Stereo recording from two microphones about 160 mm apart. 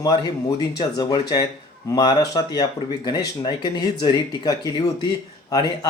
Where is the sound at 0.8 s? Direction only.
25° left (ahead or behind).